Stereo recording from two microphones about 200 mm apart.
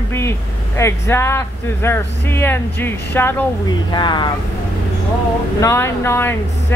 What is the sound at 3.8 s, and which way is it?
Speech, 20° left (ahead or behind).